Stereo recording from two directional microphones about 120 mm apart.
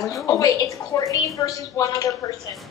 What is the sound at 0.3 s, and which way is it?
A woman's voice, 30° left (ahead or behind).